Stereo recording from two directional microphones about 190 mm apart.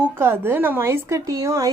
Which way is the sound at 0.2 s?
10° right (ahead or behind).